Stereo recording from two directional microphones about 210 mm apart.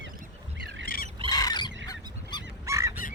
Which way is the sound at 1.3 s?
20° left (ahead or behind).